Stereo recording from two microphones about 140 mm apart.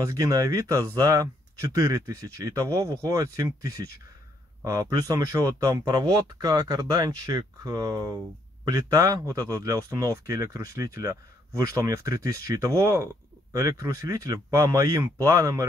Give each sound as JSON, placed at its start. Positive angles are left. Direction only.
{"t": 0.0, "sound": "a man's voice", "side_deg": -25}